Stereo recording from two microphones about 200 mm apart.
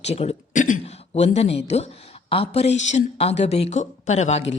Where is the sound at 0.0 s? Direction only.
30° left (ahead or behind).